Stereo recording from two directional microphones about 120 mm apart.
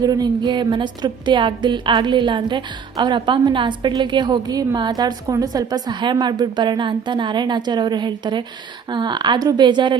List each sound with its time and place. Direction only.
0.0 s a woman's voice: 35° right (ahead or behind)